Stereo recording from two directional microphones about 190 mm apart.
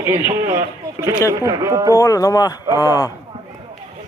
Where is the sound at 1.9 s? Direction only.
15° left (ahead or behind).